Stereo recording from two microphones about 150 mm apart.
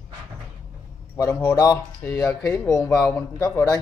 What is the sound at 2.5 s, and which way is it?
Speech, 20° left (ahead or behind).